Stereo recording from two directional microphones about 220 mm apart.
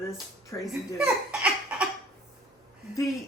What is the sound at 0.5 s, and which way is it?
Speech, 15° left (ahead or behind).